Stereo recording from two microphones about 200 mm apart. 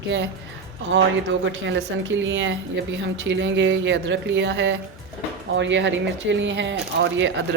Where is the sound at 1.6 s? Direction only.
70° right (ahead or behind).